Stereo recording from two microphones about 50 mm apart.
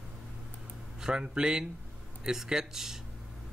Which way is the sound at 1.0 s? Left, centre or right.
Centre.